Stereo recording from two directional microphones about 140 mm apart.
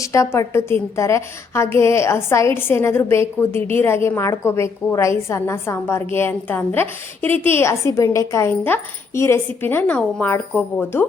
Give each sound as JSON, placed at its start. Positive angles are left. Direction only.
{"t": 0.0, "sound": "a woman's voice", "side_deg": 20}